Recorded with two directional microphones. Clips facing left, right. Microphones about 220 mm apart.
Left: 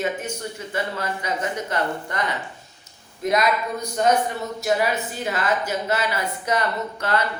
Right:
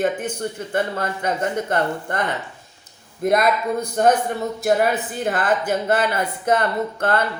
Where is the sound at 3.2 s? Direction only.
50° right (ahead or behind).